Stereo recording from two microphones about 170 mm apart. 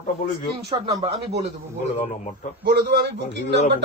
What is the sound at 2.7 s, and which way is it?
Speech, 70° right (ahead or behind).